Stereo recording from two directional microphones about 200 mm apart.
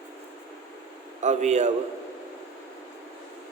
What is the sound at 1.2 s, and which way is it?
Speech, 35° right (ahead or behind).